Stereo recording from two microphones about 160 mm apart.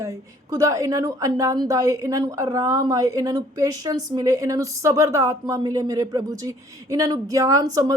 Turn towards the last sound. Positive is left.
turn(degrees=-20)  # may be behind; listen again after turning